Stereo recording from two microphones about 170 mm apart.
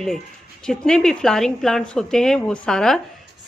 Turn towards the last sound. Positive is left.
turn(degrees=5)  # may be behind; listen again after turning